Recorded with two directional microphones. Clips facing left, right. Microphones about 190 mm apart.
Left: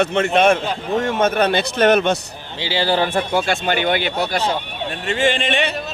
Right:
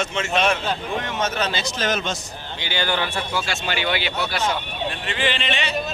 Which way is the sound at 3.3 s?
55° left (ahead or behind).